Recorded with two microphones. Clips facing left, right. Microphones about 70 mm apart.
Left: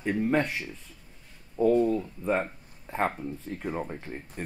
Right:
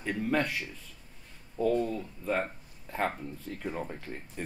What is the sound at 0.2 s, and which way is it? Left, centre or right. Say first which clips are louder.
Speech: left 2 dB; left.